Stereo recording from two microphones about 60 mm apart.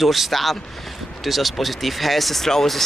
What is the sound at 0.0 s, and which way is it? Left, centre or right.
Speech, centre.